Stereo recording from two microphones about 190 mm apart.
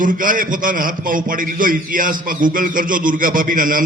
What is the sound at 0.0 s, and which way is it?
A man's voice, 45° right (ahead or behind).